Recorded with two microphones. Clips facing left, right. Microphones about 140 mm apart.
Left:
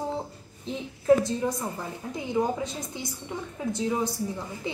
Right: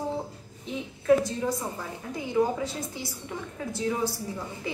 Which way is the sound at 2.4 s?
20° left (ahead or behind).